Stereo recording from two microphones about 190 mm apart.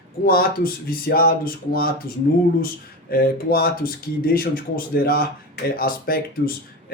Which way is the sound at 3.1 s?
50° left (ahead or behind).